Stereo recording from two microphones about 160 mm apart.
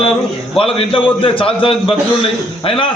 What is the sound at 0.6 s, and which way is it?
A man's voice, 35° left (ahead or behind).